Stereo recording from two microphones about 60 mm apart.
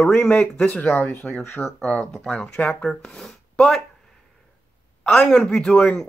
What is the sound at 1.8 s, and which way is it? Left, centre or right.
Speech, centre.